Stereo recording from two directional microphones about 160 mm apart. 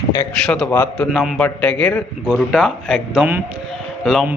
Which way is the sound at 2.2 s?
5° right (ahead or behind).